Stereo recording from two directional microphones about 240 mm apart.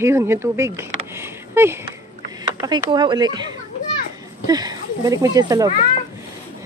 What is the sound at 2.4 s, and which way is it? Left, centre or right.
Speech, centre.